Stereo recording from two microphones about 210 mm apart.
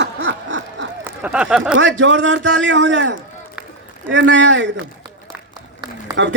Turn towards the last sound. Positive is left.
turn(degrees=-60)  # may be behind; listen again after turning